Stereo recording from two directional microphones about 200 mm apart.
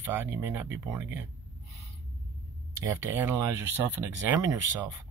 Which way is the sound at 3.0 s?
15° right (ahead or behind).